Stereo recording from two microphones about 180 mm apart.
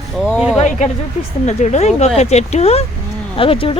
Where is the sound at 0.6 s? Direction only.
40° left (ahead or behind).